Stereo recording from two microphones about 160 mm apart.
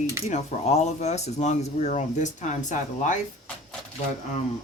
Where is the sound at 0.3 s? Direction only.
45° left (ahead or behind).